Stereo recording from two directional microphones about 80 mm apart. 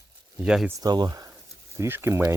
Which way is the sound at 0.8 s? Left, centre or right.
Right.